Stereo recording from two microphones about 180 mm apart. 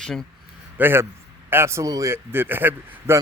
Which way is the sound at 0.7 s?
10° right (ahead or behind).